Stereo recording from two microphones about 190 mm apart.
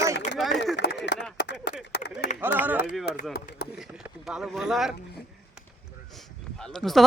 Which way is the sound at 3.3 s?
55° left (ahead or behind).